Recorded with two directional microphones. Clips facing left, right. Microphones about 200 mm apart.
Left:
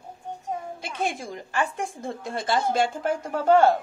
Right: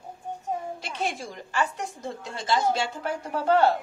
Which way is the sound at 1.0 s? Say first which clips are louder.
Left 3 dB; 55° left (ahead or behind).